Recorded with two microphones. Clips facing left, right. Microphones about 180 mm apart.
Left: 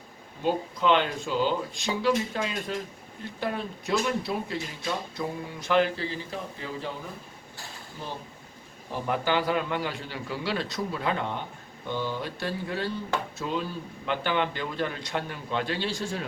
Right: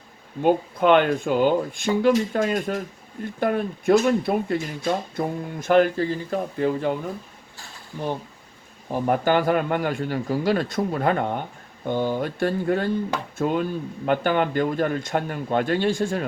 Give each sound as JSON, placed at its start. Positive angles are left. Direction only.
{"t": 0.4, "sound": "speech", "side_deg": -55}
{"t": 8.9, "sound": "speech", "side_deg": -50}